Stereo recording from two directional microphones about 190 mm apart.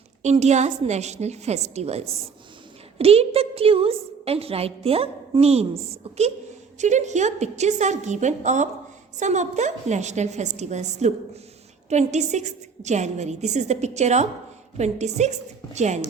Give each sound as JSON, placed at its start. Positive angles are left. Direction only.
{"t": 0.2, "sound": "a woman's voice", "side_deg": -35}